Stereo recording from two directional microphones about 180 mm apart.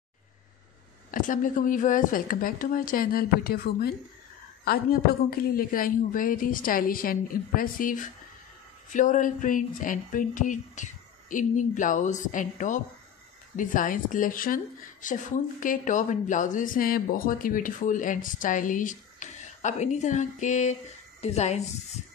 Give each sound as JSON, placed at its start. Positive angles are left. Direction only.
{"t": 1.1, "sound": "speech", "side_deg": 50}
{"t": 5.6, "sound": "a woman's voice", "side_deg": 50}